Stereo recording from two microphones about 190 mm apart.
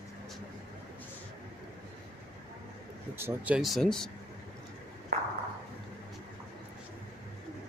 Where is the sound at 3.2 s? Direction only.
10° right (ahead or behind).